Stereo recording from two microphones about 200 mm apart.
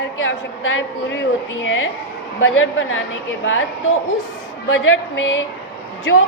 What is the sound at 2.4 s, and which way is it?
Speech, 80° left.